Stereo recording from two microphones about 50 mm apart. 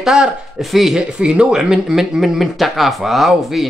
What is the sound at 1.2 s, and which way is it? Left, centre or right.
Speech, centre.